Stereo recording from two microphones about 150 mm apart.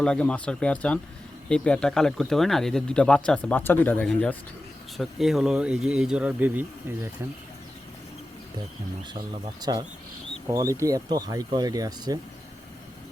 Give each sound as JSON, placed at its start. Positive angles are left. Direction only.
{"t": 0.0, "sound": "speech", "side_deg": 5}
{"t": 9.6, "sound": "speech", "side_deg": -25}